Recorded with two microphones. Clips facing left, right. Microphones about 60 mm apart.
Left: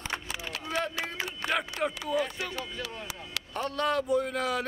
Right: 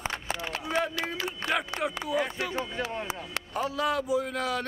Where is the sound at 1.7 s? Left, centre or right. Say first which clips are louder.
Even; right.